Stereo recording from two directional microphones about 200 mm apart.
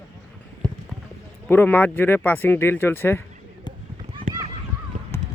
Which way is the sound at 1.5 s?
10° left (ahead or behind).